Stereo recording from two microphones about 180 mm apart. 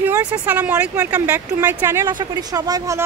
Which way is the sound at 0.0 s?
10° right (ahead or behind).